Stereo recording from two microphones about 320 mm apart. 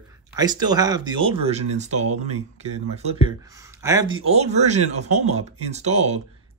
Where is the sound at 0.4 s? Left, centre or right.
Centre.